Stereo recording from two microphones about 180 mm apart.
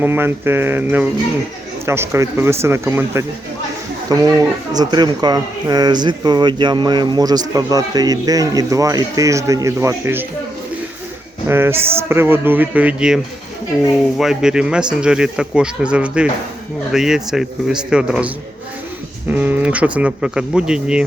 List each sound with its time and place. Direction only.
0.0 s a man's voice: 10° right (ahead or behind)
11.4 s a man's voice: 15° right (ahead or behind)
14.2 s speech: 5° right (ahead or behind)
19.3 s speech: 10° right (ahead or behind)